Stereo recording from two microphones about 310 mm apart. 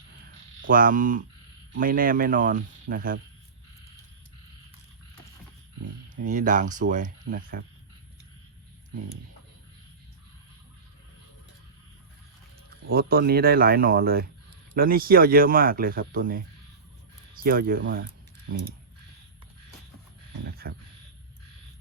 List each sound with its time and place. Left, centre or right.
0.6 s speech: right
6.2 s speech: right
12.9 s speech: right
17.4 s speech: right
20.4 s a sound: right